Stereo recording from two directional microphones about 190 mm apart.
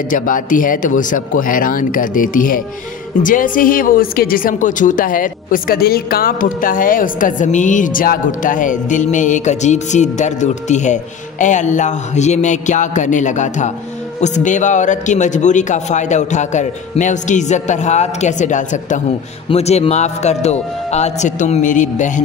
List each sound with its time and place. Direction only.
0.1 s a woman's voice: 45° left (ahead or behind)